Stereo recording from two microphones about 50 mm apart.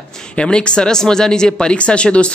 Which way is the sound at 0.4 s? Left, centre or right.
Centre.